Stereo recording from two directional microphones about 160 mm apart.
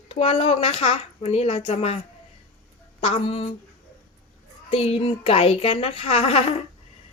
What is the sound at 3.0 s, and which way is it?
Speech, 35° left (ahead or behind).